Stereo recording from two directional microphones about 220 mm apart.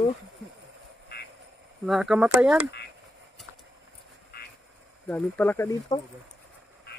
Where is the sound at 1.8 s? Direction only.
Centre (ahead or behind).